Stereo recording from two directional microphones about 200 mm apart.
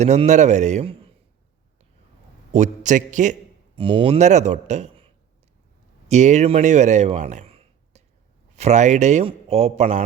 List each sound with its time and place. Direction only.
0.0 s speech: 35° right (ahead or behind)
2.5 s speech: 35° right (ahead or behind)
3.8 s speech: 25° right (ahead or behind)